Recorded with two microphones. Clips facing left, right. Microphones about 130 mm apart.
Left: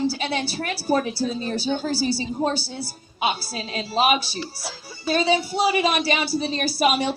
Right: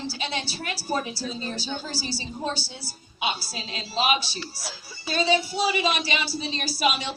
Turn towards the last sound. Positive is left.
turn(degrees=55)  # may be behind; listen again after turning